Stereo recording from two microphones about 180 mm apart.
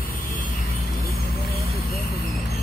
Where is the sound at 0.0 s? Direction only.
50° left (ahead or behind).